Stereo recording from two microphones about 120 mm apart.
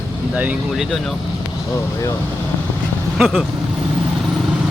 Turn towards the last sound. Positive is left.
turn(degrees=-5)  # may be behind; listen again after turning